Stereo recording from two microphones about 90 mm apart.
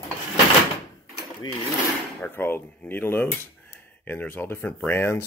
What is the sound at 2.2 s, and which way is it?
Speech, 25° left (ahead or behind).